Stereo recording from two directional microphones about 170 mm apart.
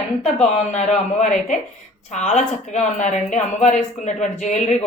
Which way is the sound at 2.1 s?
40° left (ahead or behind).